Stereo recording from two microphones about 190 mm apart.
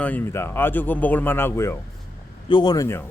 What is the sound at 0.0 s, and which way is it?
Speech, 10° left (ahead or behind).